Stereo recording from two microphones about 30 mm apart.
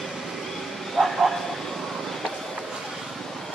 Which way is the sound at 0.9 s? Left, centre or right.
Centre.